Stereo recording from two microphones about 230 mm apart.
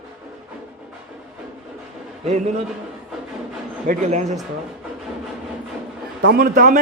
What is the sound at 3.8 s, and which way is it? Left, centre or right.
Speech, right.